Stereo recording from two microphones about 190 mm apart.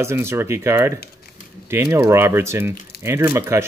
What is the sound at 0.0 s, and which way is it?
Speech, 15° right (ahead or behind).